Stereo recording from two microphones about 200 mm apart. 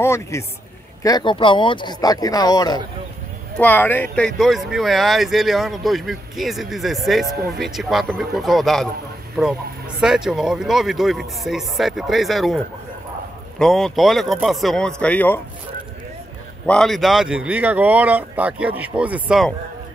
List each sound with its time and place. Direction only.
0.0 s a man's voice: 15° left (ahead or behind)
3.5 s speech: 10° left (ahead or behind)
16.6 s speech: 5° left (ahead or behind)